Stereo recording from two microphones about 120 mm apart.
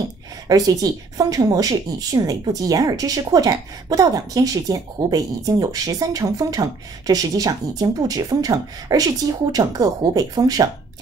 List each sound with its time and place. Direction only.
0.5 s speech: 30° right (ahead or behind)